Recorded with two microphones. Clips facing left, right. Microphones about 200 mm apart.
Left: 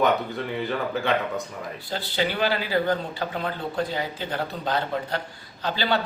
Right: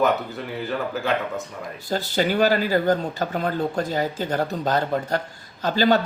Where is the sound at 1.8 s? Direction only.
45° right (ahead or behind).